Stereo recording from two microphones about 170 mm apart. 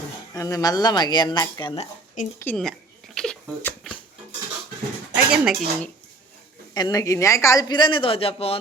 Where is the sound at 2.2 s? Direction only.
50° left (ahead or behind).